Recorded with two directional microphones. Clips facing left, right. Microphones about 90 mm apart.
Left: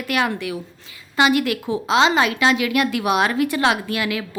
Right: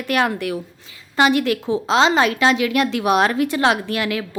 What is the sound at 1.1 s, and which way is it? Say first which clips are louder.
A woman's voice: right 1 dB; 35° right (ahead or behind).